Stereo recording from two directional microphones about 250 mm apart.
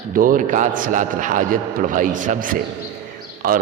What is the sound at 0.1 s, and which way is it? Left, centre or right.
A man's voice, right.